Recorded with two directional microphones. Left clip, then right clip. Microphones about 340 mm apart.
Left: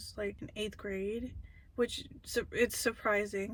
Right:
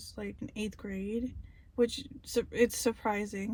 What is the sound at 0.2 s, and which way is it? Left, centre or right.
Speech, centre.